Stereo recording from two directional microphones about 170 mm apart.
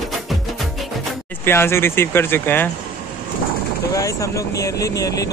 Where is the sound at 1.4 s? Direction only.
15° left (ahead or behind).